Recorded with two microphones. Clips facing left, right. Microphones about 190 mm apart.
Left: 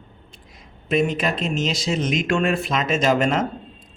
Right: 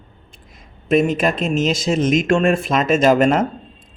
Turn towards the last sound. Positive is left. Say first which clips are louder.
# right 5 dB
turn(degrees=-50)  # may be behind; listen again after turning